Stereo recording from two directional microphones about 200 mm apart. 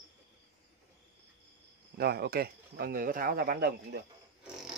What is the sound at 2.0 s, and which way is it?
Speech, 55° right (ahead or behind).